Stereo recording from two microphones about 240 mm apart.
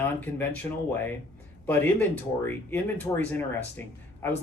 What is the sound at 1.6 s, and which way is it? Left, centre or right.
Speech, centre.